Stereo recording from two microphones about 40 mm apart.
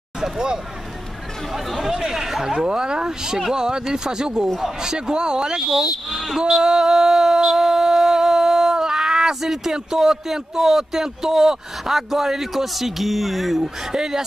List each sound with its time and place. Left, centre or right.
0.2 s speech: centre
1.8 s speech: centre
4.6 s speech: centre
4.9 s speech: centre
5.7 s speech: centre
6.4 s music: centre
7.5 s a sound: centre
13.9 s speech: centre